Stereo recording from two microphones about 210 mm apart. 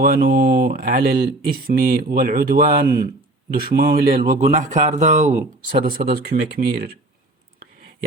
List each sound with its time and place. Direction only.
0.0 s speech: 40° right (ahead or behind)